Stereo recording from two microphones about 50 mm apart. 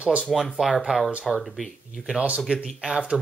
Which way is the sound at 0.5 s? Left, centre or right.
Centre.